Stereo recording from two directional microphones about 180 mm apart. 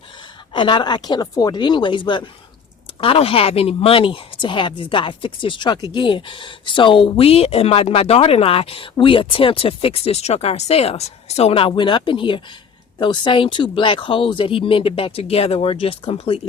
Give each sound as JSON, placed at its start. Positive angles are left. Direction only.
{"t": 0.5, "sound": "speech", "side_deg": 25}